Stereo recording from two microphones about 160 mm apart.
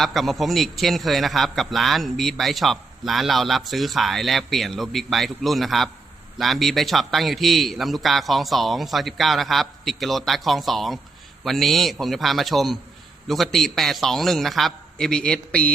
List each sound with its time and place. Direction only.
0.0 s a man's voice: centre (ahead or behind)